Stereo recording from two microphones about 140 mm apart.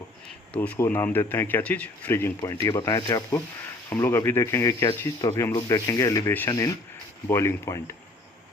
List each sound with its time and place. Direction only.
0.5 s speech: 10° left (ahead or behind)
6.5 s speech: 25° left (ahead or behind)